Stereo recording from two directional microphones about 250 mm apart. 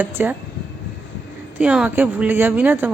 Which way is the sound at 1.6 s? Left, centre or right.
Centre.